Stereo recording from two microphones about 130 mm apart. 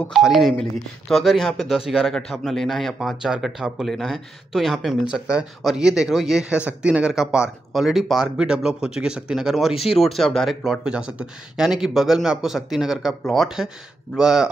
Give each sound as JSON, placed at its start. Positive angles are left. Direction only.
{"t": 0.0, "sound": "speech", "side_deg": 0}